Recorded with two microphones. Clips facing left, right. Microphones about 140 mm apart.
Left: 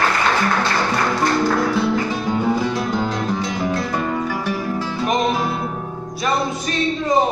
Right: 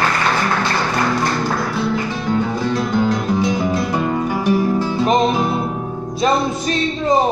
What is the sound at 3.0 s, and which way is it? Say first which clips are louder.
Music: right 5 dB; centre (ahead or behind).